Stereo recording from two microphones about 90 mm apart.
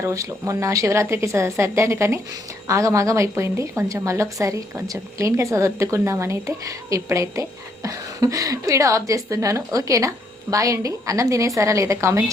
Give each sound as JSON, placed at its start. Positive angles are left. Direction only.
{"t": 0.0, "sound": "a woman's voice", "side_deg": -35}